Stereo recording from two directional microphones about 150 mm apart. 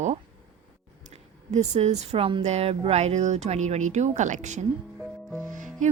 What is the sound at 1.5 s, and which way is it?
Speech, 50° right (ahead or behind).